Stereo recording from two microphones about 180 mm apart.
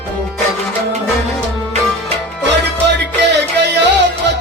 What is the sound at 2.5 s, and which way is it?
Music, 75° right (ahead or behind).